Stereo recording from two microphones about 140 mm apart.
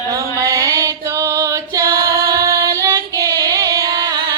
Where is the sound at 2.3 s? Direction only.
25° right (ahead or behind).